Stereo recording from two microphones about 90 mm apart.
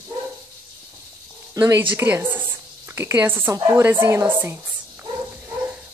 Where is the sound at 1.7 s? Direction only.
25° right (ahead or behind).